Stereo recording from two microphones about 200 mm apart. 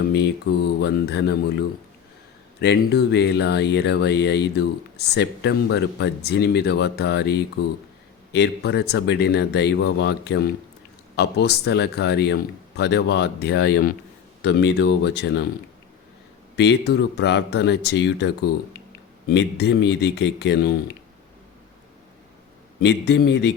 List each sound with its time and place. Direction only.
0.8 s speech: 55° left (ahead or behind)
2.6 s speech: 55° left (ahead or behind)
16.6 s speech: 55° left (ahead or behind)
22.8 s speech: 55° left (ahead or behind)